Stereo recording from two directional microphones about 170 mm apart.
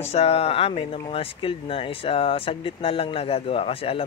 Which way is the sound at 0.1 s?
40° left (ahead or behind).